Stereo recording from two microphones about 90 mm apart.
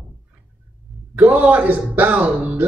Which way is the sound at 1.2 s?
20° right (ahead or behind).